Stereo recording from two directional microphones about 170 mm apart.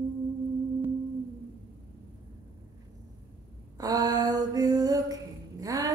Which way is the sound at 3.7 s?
20° right (ahead or behind).